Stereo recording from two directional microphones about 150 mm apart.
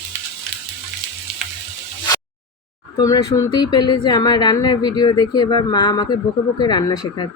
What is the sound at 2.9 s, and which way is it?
Speech, 25° left (ahead or behind).